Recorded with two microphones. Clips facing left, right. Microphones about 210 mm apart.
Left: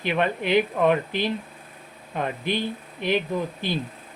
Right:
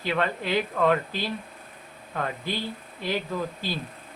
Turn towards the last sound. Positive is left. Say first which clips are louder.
# left 3 dB
turn(degrees=20)  # may be behind; listen again after turning